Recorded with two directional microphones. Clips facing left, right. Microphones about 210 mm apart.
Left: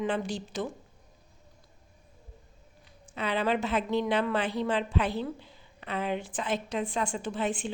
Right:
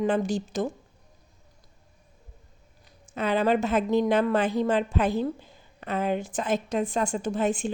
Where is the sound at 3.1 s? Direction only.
45° right (ahead or behind).